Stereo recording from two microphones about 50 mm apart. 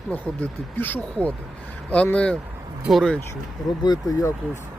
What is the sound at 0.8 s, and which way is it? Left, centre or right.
Speech, left.